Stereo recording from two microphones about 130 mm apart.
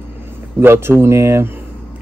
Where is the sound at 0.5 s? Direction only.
20° right (ahead or behind).